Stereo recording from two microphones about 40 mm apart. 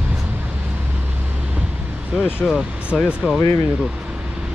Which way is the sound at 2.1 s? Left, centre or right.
Centre.